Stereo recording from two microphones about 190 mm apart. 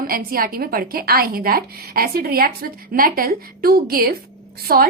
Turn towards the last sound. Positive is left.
turn(degrees=-50)  # may be behind; listen again after turning